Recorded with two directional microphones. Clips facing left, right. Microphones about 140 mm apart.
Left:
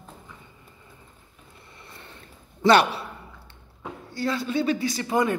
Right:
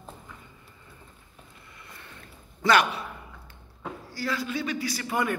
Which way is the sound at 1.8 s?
30° left (ahead or behind).